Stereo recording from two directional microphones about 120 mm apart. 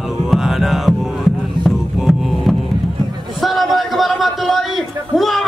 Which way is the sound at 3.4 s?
Centre (ahead or behind).